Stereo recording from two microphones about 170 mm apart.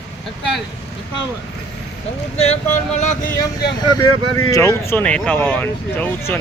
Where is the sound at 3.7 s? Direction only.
20° left (ahead or behind).